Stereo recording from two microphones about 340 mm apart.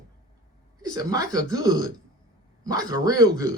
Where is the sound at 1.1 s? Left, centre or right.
Centre.